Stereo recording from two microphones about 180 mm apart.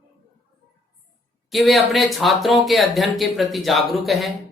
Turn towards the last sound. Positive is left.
turn(degrees=0)  # may be behind; listen again after turning